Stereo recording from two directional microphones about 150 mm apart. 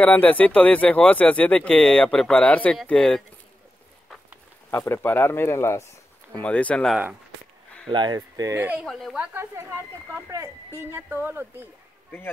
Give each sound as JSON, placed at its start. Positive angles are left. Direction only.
{"t": 0.0, "sound": "speech", "side_deg": 10}
{"t": 4.6, "sound": "speech", "side_deg": 15}
{"t": 7.9, "sound": "speech", "side_deg": -30}
{"t": 8.5, "sound": "speech", "side_deg": -10}